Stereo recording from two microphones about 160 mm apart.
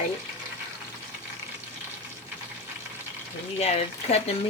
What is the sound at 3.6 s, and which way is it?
Speech, 40° left (ahead or behind).